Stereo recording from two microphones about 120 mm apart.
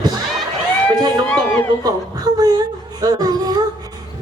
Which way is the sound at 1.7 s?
35° right (ahead or behind).